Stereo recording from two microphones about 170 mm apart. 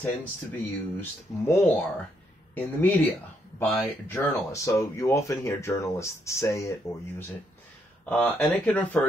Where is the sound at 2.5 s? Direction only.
10° left (ahead or behind).